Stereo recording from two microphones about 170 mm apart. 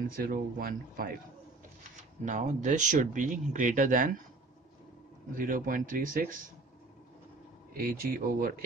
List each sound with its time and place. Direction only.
0.1 s speech: 55° right (ahead or behind)
1.8 s speech: 45° right (ahead or behind)
5.3 s speech: 55° right (ahead or behind)
7.7 s speech: 55° right (ahead or behind)